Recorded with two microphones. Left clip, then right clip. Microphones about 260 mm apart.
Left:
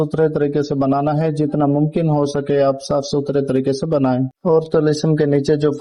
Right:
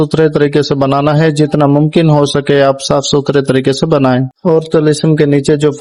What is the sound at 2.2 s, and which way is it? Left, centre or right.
Speech, right.